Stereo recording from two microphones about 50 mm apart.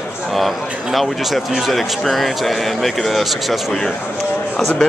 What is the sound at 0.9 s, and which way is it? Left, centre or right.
Speech, centre.